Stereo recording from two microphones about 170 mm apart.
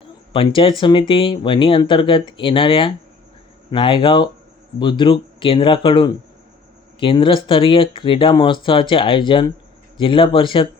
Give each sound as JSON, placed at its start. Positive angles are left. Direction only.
{"t": 0.3, "sound": "speech", "side_deg": 30}